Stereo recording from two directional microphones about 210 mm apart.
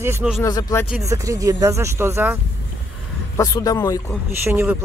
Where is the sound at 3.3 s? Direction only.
15° left (ahead or behind).